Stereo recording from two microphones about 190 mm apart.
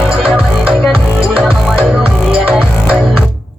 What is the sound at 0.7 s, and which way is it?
Music, 10° left (ahead or behind).